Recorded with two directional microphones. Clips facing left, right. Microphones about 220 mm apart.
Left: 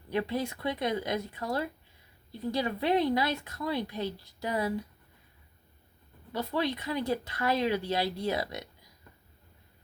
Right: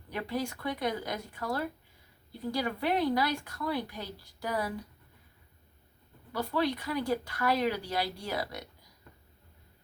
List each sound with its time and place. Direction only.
0.1 s speech: 25° left (ahead or behind)
6.3 s speech: 20° left (ahead or behind)